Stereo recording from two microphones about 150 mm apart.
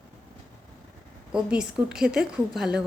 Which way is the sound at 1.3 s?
5° right (ahead or behind).